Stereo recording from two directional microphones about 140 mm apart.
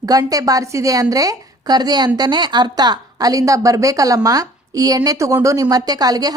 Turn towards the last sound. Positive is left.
turn(degrees=-25)  # may be behind; listen again after turning